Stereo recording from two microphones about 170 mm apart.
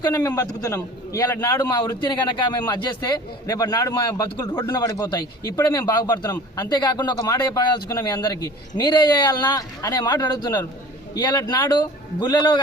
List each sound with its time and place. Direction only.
0.0 s a man's voice: 20° left (ahead or behind)